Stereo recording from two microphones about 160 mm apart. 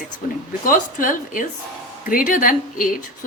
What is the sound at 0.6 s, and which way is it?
A woman's voice, 60° left (ahead or behind).